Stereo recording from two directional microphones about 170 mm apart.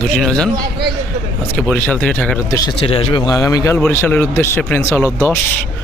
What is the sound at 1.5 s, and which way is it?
Speech, 10° left (ahead or behind).